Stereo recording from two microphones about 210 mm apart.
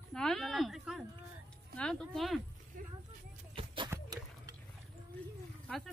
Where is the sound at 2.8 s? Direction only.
40° right (ahead or behind).